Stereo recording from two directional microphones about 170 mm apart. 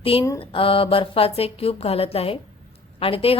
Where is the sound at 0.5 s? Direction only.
30° left (ahead or behind).